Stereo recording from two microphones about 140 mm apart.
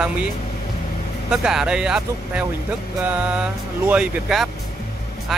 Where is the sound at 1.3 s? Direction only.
5° right (ahead or behind).